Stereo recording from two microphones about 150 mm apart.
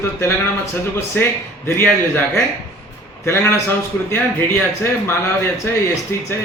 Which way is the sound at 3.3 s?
15° left (ahead or behind).